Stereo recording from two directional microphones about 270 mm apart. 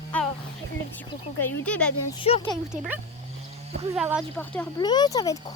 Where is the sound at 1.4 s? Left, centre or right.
Centre.